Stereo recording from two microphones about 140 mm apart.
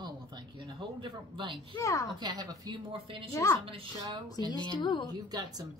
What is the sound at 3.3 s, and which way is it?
Speech, 20° left (ahead or behind).